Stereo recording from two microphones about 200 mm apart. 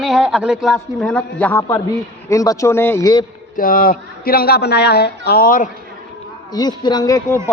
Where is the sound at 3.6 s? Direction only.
45° left (ahead or behind).